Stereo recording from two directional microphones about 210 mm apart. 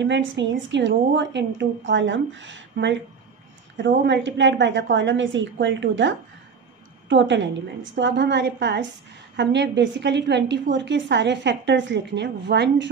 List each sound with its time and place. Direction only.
0.0 s a woman's voice: 60° right (ahead or behind)
4.0 s a woman's voice: 60° right (ahead or behind)